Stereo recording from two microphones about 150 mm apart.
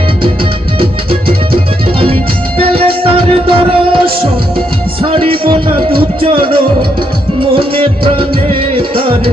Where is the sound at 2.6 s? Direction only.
40° right (ahead or behind).